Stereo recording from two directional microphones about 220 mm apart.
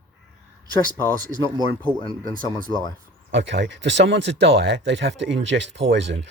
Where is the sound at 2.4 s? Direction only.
20° left (ahead or behind).